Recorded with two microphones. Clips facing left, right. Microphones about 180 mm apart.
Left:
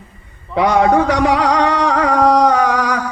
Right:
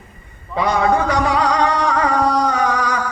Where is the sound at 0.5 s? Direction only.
75° left (ahead or behind); by 2.9 s 90° left.